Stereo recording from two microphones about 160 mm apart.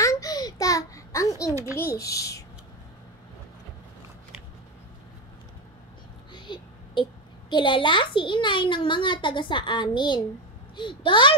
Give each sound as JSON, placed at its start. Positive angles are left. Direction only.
{"t": 0.0, "sound": "a sound", "side_deg": 20}
{"t": 2.0, "sound": "a child's voice", "side_deg": 20}
{"t": 6.3, "sound": "a child's voice", "side_deg": 30}